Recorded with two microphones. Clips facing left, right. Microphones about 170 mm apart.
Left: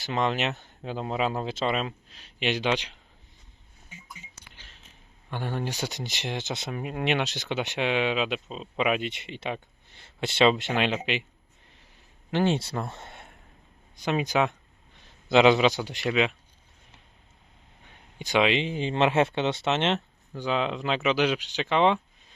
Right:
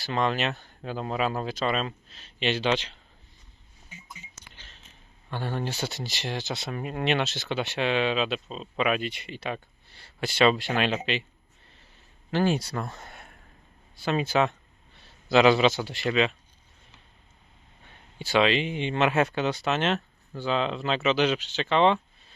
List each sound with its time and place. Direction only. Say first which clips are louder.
0.0 s speech: even; 20° left (ahead or behind)
4.4 s a sound: right 1 dB; 10° left (ahead or behind)
5.3 s speech: even; 15° left (ahead or behind)
12.3 s speech: even; 20° left (ahead or behind)
17.8 s a sound: right 1 dB; 15° left (ahead or behind)
18.6 s speech: left 1 dB; 35° left (ahead or behind); by 22.4 s 10° left (ahead or behind)